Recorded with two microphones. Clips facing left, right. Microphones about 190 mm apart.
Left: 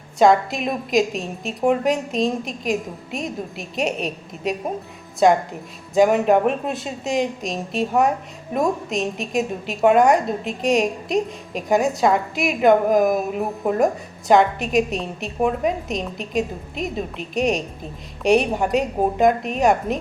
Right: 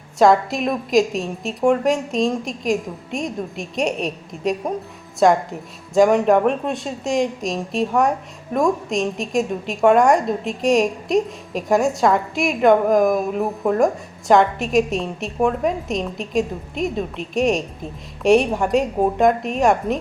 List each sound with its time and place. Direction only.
0.2 s a woman's voice: centre (ahead or behind)